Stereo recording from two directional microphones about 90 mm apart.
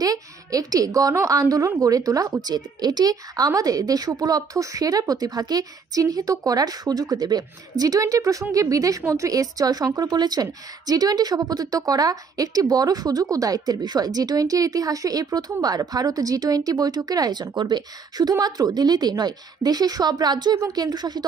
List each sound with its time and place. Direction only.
0.0 s a woman's voice: 40° right (ahead or behind)